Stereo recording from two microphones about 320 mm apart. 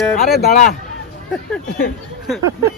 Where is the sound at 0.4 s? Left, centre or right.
Left.